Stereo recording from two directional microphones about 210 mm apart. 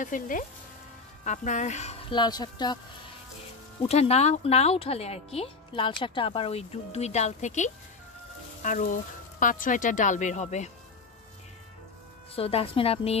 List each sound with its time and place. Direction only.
0.0 s speech: 40° left (ahead or behind); by 2.8 s 20° left (ahead or behind)
3.8 s speech: 30° left (ahead or behind)
12.4 s speech: 25° left (ahead or behind)